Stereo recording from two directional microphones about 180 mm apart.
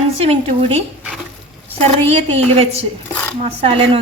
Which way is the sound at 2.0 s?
35° right (ahead or behind).